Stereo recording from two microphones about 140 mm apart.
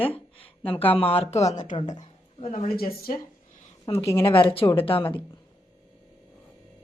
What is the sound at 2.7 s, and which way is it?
Speech, 90° left.